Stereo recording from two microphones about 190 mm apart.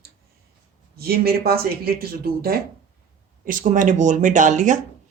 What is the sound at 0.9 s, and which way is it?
Speech, 55° right (ahead or behind).